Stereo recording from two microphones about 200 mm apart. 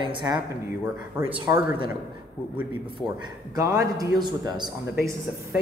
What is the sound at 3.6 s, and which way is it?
Speech, 15° right (ahead or behind).